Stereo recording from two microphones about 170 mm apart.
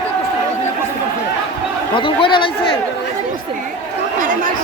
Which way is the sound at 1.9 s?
30° left (ahead or behind).